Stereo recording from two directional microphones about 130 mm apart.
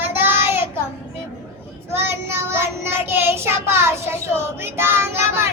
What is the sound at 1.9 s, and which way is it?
Child singing, 20° right (ahead or behind).